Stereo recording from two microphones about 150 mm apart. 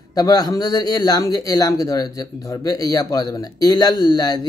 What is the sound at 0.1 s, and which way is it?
Speech, 25° left (ahead or behind).